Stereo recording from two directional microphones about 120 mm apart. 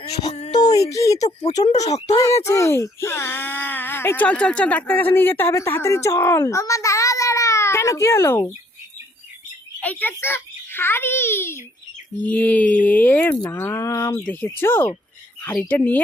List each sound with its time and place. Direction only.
0.7 s speech: 65° left (ahead or behind)
0.9 s speech: 25° left (ahead or behind)
1.2 s speech: 70° left (ahead or behind)
2.4 s speech: 25° left (ahead or behind)
9.8 s a child's voice: 15° left (ahead or behind)
14.3 s speech: 15° left (ahead or behind)